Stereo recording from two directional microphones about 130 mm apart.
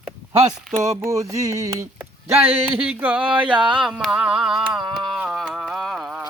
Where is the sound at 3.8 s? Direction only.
Centre (ahead or behind).